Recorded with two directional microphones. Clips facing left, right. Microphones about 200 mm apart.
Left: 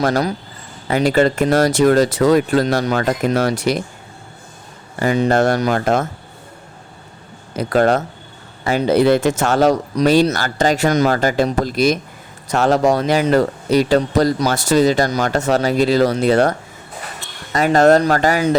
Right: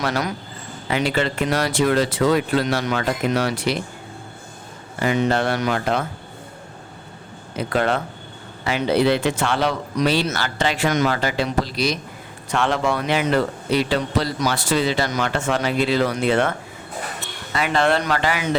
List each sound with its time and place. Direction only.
0.0 s a man's voice: 35° left (ahead or behind)
4.9 s speech: 40° left (ahead or behind)
7.5 s a man's voice: 40° left (ahead or behind)